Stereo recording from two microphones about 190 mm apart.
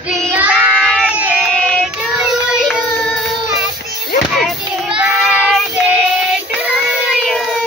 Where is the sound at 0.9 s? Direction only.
5° right (ahead or behind).